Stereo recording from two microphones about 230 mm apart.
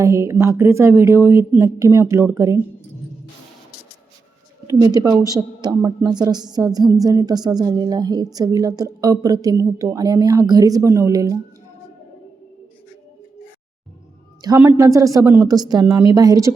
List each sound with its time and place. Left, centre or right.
0.0 s a woman's voice: centre
4.6 s a woman's voice: centre
14.4 s a woman's voice: centre